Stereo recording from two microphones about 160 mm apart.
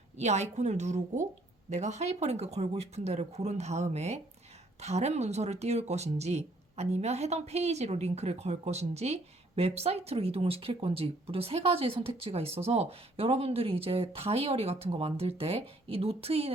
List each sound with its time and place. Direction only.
0.2 s speech: 45° right (ahead or behind)